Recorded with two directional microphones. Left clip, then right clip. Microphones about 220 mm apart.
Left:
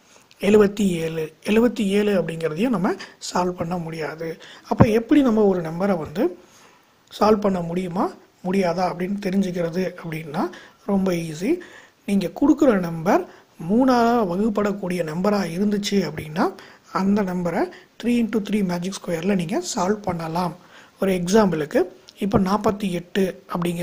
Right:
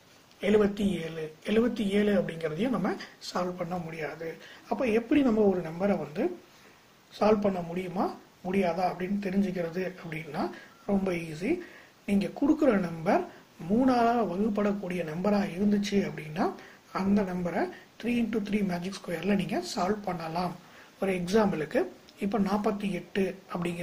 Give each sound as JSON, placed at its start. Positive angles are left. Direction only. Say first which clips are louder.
{"t": 0.4, "sound": "speech", "louder": "left 9 dB", "side_deg": 45}